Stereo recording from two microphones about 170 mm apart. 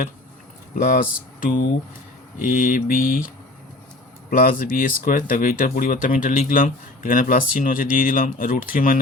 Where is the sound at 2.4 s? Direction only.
55° left (ahead or behind).